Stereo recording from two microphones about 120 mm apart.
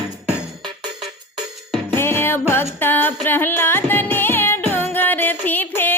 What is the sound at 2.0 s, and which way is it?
Music, 20° left (ahead or behind).